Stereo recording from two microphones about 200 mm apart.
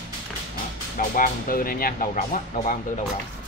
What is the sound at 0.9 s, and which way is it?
Speech, 45° left (ahead or behind).